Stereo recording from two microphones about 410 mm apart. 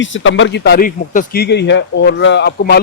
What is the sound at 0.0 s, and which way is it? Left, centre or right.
A man's voice, left.